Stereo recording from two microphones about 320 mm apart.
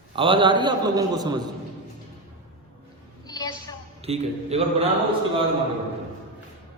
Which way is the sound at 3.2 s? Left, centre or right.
Centre.